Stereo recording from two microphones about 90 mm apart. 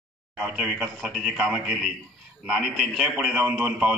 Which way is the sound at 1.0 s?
Centre (ahead or behind).